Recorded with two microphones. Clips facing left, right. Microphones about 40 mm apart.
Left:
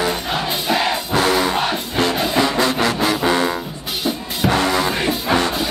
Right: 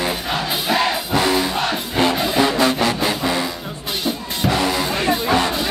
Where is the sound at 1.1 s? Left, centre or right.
Left.